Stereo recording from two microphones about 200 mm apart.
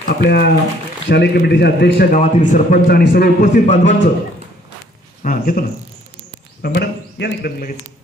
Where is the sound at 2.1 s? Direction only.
40° left (ahead or behind).